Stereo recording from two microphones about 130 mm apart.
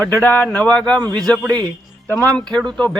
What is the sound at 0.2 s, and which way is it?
A man's voice, 15° left (ahead or behind).